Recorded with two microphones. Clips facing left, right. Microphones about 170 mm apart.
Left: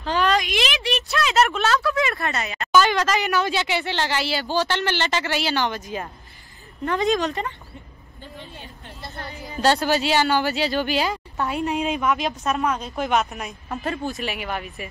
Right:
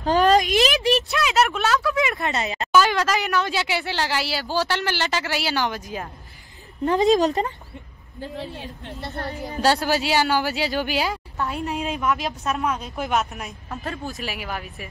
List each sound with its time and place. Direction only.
0.0 s speech: 40° right (ahead or behind)
1.1 s speech: 5° right (ahead or behind); by 2.7 s 25° right (ahead or behind)
2.7 s a woman's voice: 5° right (ahead or behind)
6.8 s a woman's voice: 20° right (ahead or behind)
7.2 s speech: 40° right (ahead or behind)
9.6 s a woman's voice: 10° right (ahead or behind)